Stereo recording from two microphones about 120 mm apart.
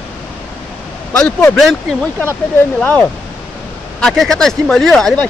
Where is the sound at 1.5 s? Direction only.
Centre (ahead or behind).